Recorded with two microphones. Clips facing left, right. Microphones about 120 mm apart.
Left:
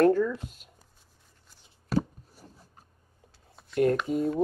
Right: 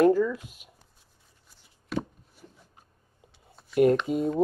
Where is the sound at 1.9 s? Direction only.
40° left (ahead or behind).